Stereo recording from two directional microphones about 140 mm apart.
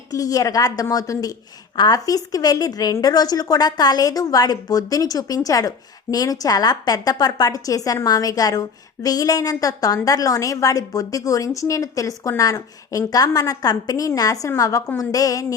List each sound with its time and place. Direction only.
0.1 s a woman's voice: 25° left (ahead or behind)